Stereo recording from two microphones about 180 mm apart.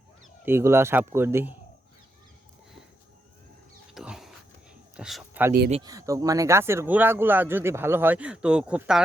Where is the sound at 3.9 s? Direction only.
Centre (ahead or behind).